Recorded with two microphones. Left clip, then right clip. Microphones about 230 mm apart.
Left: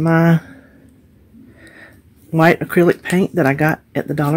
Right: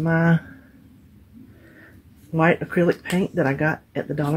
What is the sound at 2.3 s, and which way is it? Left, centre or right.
Speech, left.